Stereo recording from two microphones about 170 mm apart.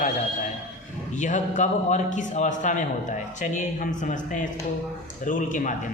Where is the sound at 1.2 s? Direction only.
45° left (ahead or behind).